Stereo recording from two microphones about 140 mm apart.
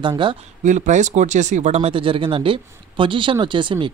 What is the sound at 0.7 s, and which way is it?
Speech, 60° right (ahead or behind).